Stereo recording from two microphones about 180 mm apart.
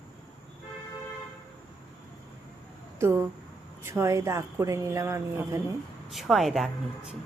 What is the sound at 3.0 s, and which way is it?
Speech, 15° right (ahead or behind).